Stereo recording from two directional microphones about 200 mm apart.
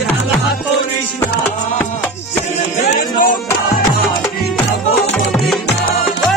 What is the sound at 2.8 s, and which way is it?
Music, 45° left (ahead or behind).